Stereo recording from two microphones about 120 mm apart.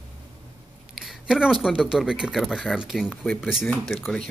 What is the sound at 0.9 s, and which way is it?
Speech, 5° right (ahead or behind).